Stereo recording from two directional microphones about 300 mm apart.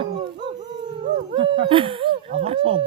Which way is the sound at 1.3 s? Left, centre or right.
Centre.